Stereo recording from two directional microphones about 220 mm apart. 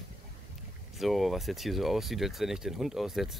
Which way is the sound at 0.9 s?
Centre (ahead or behind).